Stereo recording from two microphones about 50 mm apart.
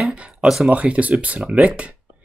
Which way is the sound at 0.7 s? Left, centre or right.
Right.